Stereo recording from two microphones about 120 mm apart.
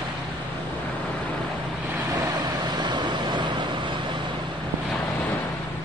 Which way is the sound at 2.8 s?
40° right (ahead or behind).